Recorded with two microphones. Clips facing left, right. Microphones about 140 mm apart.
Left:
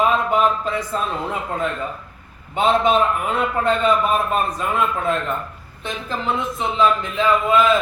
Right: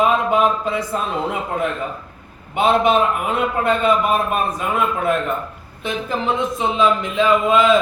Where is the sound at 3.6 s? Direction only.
10° right (ahead or behind).